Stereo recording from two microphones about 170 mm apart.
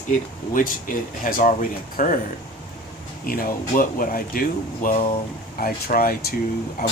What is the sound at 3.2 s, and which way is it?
Speech, 60° left (ahead or behind).